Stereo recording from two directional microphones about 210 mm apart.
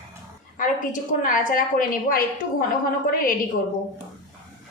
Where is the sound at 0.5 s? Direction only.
40° left (ahead or behind).